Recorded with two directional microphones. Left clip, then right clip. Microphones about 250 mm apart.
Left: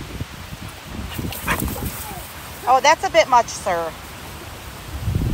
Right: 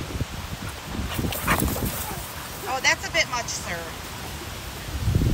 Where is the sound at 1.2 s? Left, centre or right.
Centre.